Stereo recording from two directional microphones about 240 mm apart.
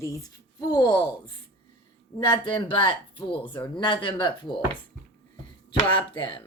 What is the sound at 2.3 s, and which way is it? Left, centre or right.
Speech, left.